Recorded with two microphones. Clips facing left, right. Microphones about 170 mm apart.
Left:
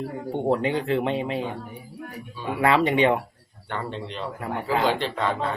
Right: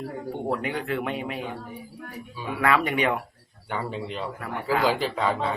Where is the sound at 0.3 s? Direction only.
25° left (ahead or behind).